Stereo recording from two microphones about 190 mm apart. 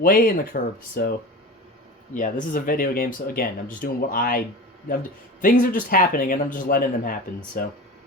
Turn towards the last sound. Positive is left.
turn(degrees=45)  # may be behind; listen again after turning